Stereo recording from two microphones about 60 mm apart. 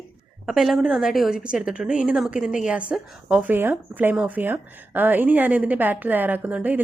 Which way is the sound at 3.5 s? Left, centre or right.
Right.